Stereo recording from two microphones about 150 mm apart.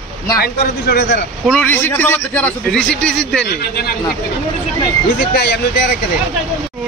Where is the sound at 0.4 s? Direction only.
90° left.